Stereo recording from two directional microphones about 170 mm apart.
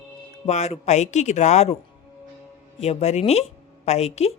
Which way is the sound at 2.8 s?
40° left (ahead or behind).